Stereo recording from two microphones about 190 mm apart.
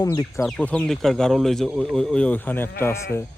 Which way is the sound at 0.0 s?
20° left (ahead or behind).